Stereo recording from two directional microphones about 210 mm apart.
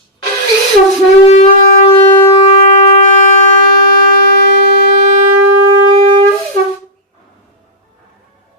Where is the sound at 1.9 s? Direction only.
25° left (ahead or behind).